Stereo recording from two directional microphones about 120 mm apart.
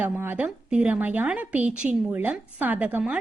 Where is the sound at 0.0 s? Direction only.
15° right (ahead or behind).